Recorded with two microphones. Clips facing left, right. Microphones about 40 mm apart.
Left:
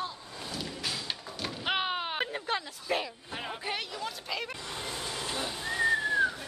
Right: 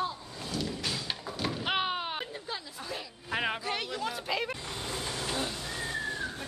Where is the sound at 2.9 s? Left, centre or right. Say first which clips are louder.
Left 9 dB; left.